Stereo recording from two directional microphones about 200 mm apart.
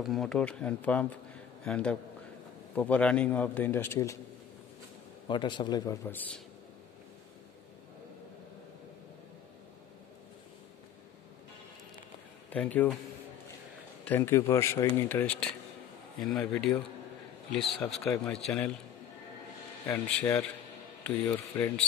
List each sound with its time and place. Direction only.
0.0 s a man's voice: centre (ahead or behind)
5.3 s speech: 25° left (ahead or behind)
12.4 s speech: 10° left (ahead or behind)
14.0 s a man's voice: 10° left (ahead or behind)
19.9 s a man's voice: 5° left (ahead or behind)